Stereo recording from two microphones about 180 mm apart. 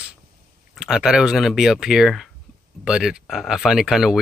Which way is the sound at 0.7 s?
Centre (ahead or behind).